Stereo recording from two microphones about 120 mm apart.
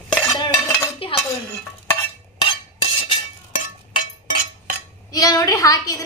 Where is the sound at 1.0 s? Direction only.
50° left (ahead or behind).